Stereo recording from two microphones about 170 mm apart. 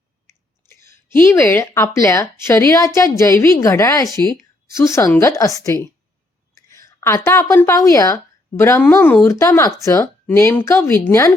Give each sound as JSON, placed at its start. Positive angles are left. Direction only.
{"t": 0.7, "sound": "a woman's voice", "side_deg": 15}